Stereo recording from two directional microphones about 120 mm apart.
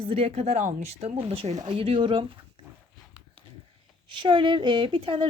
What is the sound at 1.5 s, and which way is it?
Speech, 35° right (ahead or behind).